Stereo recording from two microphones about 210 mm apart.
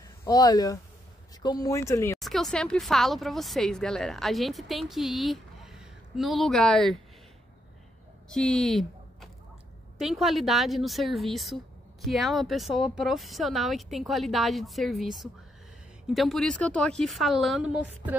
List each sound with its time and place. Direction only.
0.2 s speech: 15° left (ahead or behind)
2.1 s speech: centre (ahead or behind)
8.3 s speech: centre (ahead or behind)